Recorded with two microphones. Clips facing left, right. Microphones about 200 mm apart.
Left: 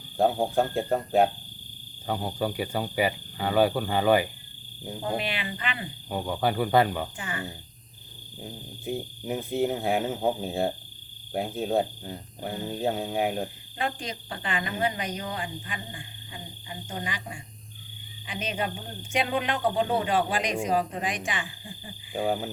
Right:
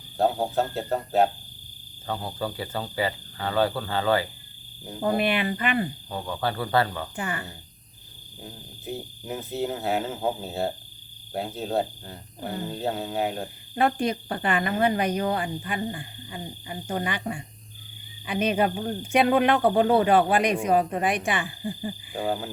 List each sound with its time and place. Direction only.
0.2 s speech: 15° left (ahead or behind)
5.1 s speech: 55° right (ahead or behind)
6.1 s speech: 15° left (ahead or behind)
7.2 s speech: 60° right (ahead or behind)
9.2 s speech: 15° left (ahead or behind)
13.7 s speech: 60° right (ahead or behind)
22.1 s frog: 10° left (ahead or behind)